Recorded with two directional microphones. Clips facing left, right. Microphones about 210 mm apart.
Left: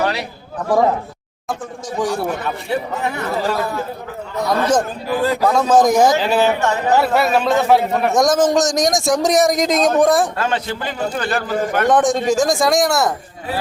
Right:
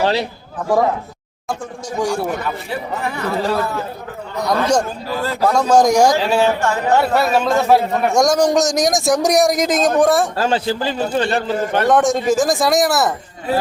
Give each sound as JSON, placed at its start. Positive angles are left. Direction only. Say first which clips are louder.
{"t": 0.0, "sound": "a man's voice", "louder": "right 3 dB", "side_deg": -30}
{"t": 2.0, "sound": "a man's voice", "louder": "right 1 dB", "side_deg": 0}
{"t": 4.4, "sound": "a man's voice", "louder": "even", "side_deg": 5}
{"t": 5.0, "sound": "a man's voice", "louder": "left 2 dB", "side_deg": 15}
{"t": 5.5, "sound": "a man's voice", "louder": "right 1 dB", "side_deg": 0}
{"t": 6.5, "sound": "speech", "louder": "even", "side_deg": 20}
{"t": 6.9, "sound": "a man's voice", "louder": "even", "side_deg": 0}
{"t": 10.3, "sound": "a man's voice", "louder": "right 3 dB", "side_deg": -30}
{"t": 11.9, "sound": "a man's voice", "louder": "right 1 dB", "side_deg": 0}